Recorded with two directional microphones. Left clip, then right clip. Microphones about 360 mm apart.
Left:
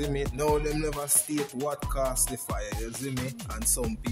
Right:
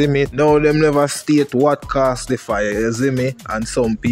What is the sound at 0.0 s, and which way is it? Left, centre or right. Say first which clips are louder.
Speech: right 14 dB; left.